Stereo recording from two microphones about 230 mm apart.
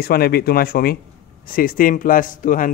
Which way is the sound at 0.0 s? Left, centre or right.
Left.